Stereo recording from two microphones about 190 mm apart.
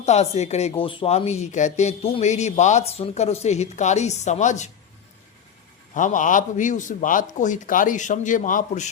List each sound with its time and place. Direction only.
0.0 s speech: 35° left (ahead or behind)
5.9 s a man's voice: 40° left (ahead or behind)